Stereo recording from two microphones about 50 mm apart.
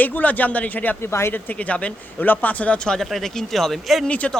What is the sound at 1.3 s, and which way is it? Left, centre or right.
Speech, left.